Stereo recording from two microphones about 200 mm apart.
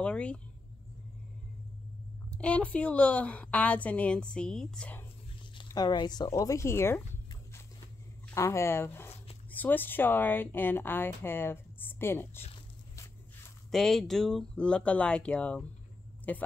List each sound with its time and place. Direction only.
0.0 s speech: 5° left (ahead or behind)
2.3 s speech: 5° left (ahead or behind)
5.6 s speech: 20° left (ahead or behind)
8.4 s speech: 15° left (ahead or behind)
13.7 s speech: centre (ahead or behind)